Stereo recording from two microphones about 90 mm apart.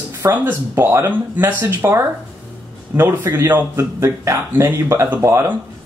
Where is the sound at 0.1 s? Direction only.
25° right (ahead or behind).